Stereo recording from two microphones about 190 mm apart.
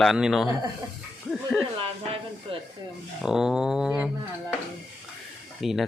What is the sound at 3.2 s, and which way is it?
Speech, 5° right (ahead or behind).